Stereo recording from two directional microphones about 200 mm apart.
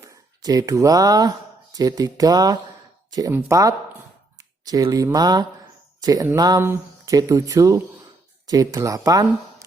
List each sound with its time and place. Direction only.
0.0 s speech: 15° right (ahead or behind)